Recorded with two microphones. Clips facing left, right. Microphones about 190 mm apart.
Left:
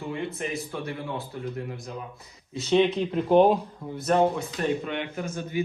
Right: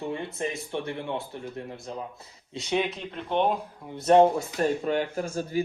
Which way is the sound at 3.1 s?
40° left (ahead or behind).